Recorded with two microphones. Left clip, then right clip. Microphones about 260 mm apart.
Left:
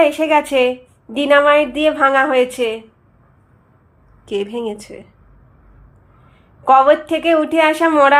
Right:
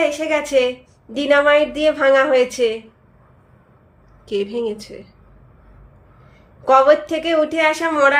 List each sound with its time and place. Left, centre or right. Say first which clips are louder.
0.0 s a woman's voice: left 5 dB; centre
4.3 s a woman's voice: even; centre
6.7 s a woman's voice: left 2 dB; centre